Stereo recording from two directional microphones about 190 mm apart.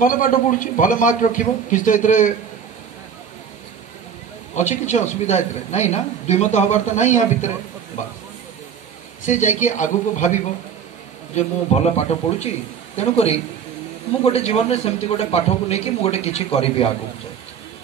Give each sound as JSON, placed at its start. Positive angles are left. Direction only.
{"t": 0.0, "sound": "a man's voice", "side_deg": 45}
{"t": 4.6, "sound": "a man's voice", "side_deg": 40}
{"t": 9.2, "sound": "a man's voice", "side_deg": 40}